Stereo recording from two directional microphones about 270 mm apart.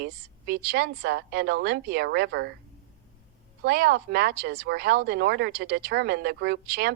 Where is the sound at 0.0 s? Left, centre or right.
Right.